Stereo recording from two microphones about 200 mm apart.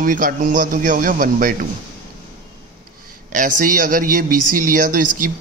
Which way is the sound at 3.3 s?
40° right (ahead or behind).